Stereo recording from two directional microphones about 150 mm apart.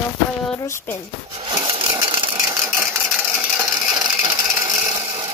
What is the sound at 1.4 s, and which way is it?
Wood, 30° right (ahead or behind).